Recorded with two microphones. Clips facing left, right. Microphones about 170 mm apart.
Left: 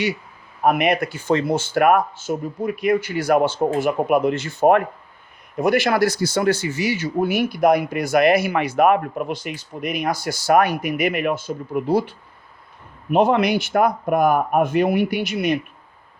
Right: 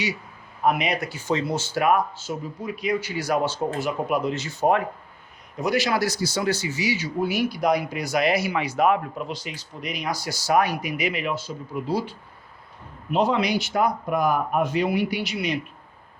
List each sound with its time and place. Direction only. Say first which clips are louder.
0.6 s speech: left 5 dB; 55° left (ahead or behind)